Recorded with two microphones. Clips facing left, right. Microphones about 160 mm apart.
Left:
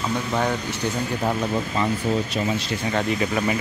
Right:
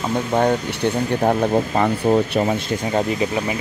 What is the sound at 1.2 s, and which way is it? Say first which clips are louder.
Speech: right 7 dB; 50° right (ahead or behind).